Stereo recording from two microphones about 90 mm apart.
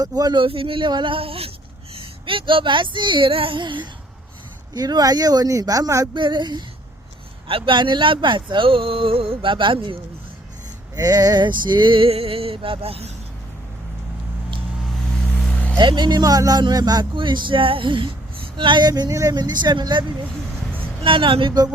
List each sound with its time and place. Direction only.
0.0 s speech: 45° right (ahead or behind)
0.4 s speech: 90° right
0.9 s a sound: 60° right (ahead or behind); by 1.5 s 90° right
2.0 s speech: 80° right; by 3.8 s 65° right (ahead or behind)
4.7 s speech: 50° right (ahead or behind)
6.1 s speech: 60° right (ahead or behind)
7.4 s speech: 80° right
10.9 s speech: 45° right (ahead or behind); by 13.0 s 85° right
15.4 s vehicle: 10° left (ahead or behind)
15.8 s speech: 55° right (ahead or behind)
17.2 s speech: 65° right (ahead or behind); by 19.4 s 40° right (ahead or behind)
19.4 s speech: 55° right (ahead or behind)
21.0 s speech: 75° right (ahead or behind)